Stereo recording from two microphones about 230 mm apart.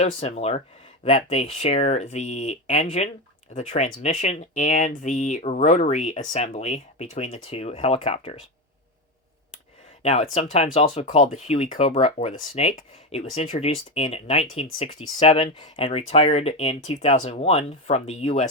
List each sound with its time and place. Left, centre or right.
0.0 s speech: left
10.0 s speech: left